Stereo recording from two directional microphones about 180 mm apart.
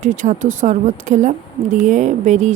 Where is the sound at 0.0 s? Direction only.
45° right (ahead or behind).